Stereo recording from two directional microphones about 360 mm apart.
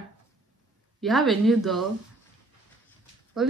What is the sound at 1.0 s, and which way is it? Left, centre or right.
Speech, centre.